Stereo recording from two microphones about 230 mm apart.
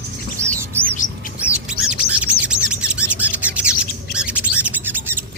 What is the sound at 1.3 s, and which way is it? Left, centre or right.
Bird, centre.